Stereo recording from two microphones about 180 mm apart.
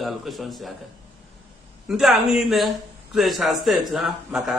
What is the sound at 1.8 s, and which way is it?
Speech, centre (ahead or behind).